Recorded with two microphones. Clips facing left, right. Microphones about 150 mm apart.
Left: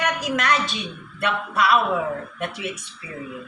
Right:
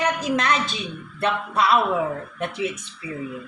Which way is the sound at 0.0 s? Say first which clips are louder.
Right 2 dB; 30° right (ahead or behind).